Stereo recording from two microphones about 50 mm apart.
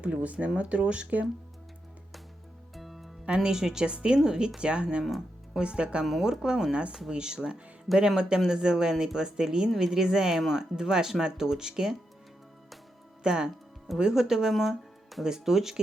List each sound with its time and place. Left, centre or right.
0.0 s speech: right
2.7 s music: centre
3.2 s speech: centre
13.2 s speech: centre